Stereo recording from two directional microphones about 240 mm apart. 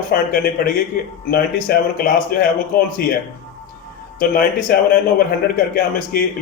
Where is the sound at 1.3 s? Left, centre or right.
Left.